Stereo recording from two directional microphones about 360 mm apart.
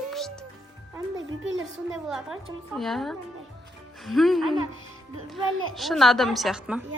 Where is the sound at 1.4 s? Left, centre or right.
Right.